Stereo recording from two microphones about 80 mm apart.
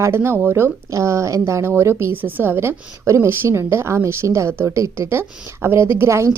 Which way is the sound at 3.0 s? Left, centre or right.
Right.